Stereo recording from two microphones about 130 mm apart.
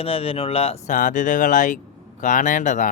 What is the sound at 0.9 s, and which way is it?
Speech, 80° left.